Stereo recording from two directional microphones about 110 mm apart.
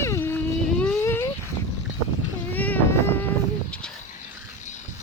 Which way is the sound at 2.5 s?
15° left (ahead or behind).